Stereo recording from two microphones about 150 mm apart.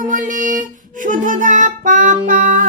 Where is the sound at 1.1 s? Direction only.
60° right (ahead or behind).